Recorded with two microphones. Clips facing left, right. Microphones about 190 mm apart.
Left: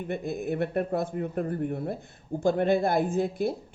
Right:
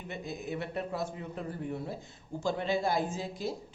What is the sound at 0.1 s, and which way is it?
Speech, 55° left (ahead or behind).